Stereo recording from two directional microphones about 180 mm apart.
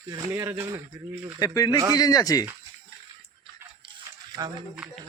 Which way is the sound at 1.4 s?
20° left (ahead or behind).